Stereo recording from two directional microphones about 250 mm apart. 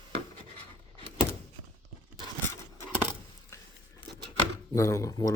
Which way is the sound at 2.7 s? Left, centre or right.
Centre.